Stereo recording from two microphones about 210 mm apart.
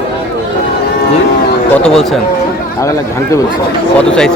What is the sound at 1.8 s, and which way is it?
Speech, centre (ahead or behind).